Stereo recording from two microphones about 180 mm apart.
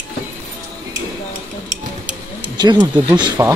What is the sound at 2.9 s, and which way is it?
Speech, 25° right (ahead or behind).